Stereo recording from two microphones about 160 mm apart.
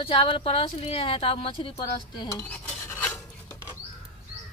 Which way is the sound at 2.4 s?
10° left (ahead or behind).